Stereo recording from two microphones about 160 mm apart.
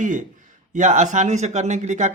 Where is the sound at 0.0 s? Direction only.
50° right (ahead or behind).